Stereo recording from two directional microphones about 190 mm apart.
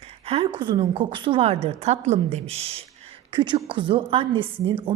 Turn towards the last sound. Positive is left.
turn(degrees=-25)  # may be behind; listen again after turning